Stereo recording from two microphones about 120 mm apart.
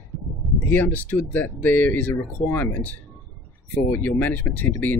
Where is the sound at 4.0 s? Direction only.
15° left (ahead or behind).